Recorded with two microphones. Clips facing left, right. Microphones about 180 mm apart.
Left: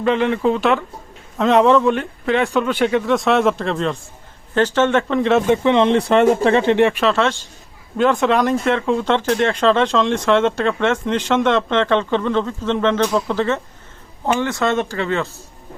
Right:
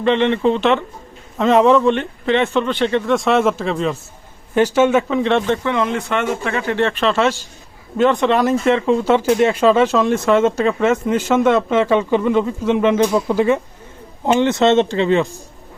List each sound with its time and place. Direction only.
0.0 s a man's voice: 5° left (ahead or behind)
5.5 s speech: 25° left (ahead or behind)
7.0 s a man's voice: centre (ahead or behind); by 15.3 s 20° right (ahead or behind)